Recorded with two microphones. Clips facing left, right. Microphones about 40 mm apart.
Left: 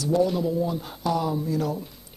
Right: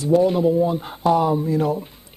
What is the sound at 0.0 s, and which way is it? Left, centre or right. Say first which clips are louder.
Speech: right 6 dB; right.